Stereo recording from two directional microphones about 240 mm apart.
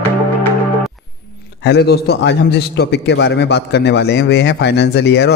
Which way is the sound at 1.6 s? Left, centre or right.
Left.